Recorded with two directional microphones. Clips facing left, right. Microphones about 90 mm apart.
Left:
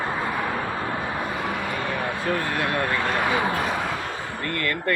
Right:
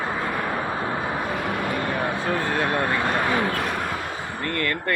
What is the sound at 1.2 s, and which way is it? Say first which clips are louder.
Vehicle: right 2 dB; centre (ahead or behind).